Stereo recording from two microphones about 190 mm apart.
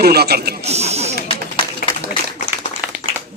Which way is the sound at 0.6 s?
35° right (ahead or behind).